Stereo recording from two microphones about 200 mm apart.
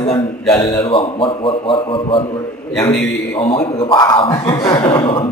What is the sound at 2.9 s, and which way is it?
Speech, 15° left (ahead or behind).